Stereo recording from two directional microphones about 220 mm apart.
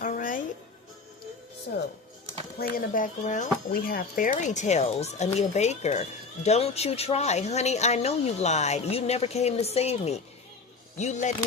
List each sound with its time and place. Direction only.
0.0 s music: 35° left (ahead or behind)
2.6 s speech: 40° left (ahead or behind)